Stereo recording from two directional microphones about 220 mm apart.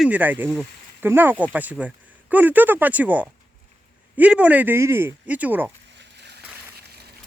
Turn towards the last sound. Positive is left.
turn(degrees=-45)  # may be behind; listen again after turning